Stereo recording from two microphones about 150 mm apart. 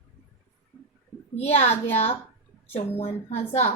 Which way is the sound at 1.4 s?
45° left (ahead or behind).